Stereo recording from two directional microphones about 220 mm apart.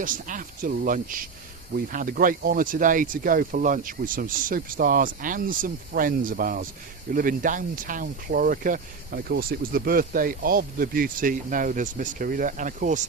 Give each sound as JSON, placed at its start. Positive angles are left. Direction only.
{"t": 0.0, "sound": "speech", "side_deg": -35}